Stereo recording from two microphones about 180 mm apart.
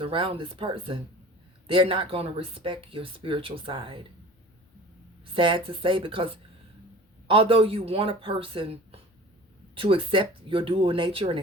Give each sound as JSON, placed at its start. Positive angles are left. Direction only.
{"t": 0.0, "sound": "speech", "side_deg": -30}
{"t": 5.2, "sound": "speech", "side_deg": -30}